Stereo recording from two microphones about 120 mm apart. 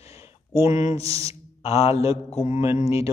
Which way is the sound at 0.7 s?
30° right (ahead or behind).